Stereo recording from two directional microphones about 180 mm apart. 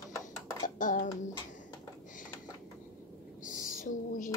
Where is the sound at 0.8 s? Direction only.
45° left (ahead or behind).